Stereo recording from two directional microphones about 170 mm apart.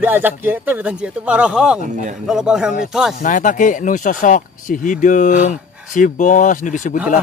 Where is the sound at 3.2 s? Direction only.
50° left (ahead or behind).